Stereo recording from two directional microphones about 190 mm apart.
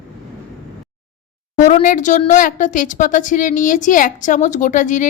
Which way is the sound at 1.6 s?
40° left (ahead or behind).